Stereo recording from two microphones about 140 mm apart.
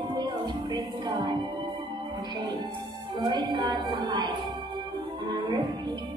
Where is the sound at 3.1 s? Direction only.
35° right (ahead or behind).